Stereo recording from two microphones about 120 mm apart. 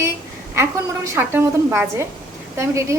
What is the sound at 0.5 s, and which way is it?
A woman's voice, 20° right (ahead or behind).